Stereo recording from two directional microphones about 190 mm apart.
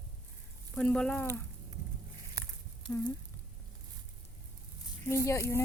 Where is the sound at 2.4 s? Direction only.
20° right (ahead or behind).